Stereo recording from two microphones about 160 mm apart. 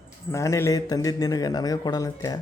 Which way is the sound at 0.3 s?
15° left (ahead or behind).